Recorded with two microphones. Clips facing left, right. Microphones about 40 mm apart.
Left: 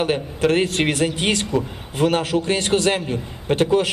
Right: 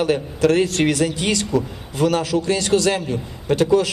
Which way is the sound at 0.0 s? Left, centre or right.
Left.